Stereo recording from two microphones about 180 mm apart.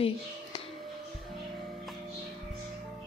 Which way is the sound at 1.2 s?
Centre (ahead or behind).